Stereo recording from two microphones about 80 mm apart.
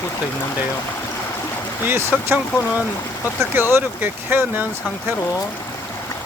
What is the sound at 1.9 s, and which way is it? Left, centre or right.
Speech, right.